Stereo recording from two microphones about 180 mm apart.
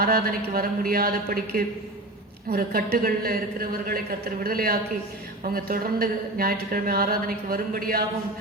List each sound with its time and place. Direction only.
0.0 s speech: 55° right (ahead or behind)